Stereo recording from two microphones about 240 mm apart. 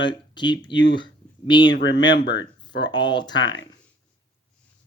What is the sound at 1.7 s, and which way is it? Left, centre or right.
Speech, left.